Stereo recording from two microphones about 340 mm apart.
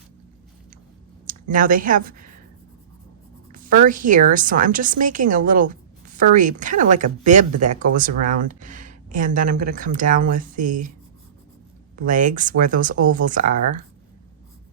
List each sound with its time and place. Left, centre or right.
1.3 s speech: right
3.5 s speech: right
12.0 s speech: right